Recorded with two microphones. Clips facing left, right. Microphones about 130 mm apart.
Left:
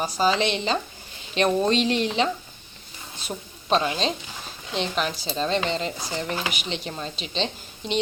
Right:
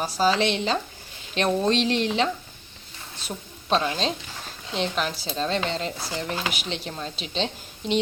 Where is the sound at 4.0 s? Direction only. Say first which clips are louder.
Left 1 dB; centre (ahead or behind).